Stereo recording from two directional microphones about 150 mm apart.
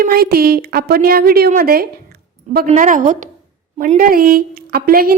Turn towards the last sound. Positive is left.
turn(degrees=-75)  # may be behind; listen again after turning